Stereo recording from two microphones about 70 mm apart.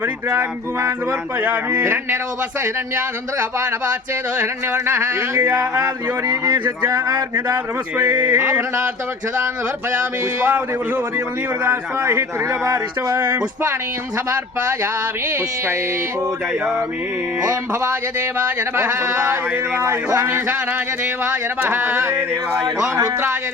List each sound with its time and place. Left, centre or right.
0.3 s speech: right
1.4 s speech: right
4.4 s speech: right
7.5 s speech: right
8.4 s speech: right
11.6 s speech: right
19.0 s speech: right
21.6 s speech: right